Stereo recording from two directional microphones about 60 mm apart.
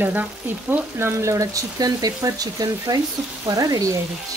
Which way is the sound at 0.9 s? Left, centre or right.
Right.